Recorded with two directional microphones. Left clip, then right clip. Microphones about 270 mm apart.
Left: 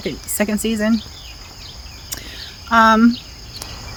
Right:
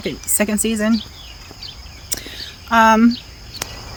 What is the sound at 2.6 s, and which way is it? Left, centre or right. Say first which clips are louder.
Speech: even; centre.